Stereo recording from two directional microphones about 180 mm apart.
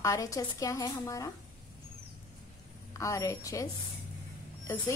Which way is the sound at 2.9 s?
15° left (ahead or behind).